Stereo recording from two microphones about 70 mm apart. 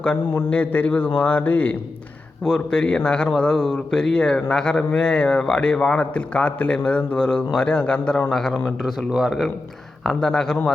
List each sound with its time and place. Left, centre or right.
0.0 s a man's voice: centre
2.4 s a man's voice: centre